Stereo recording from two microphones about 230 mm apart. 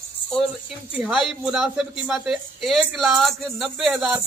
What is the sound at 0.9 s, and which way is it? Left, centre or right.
Speech, centre.